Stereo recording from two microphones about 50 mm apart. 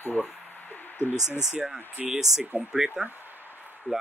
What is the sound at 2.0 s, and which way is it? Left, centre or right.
Speech, centre.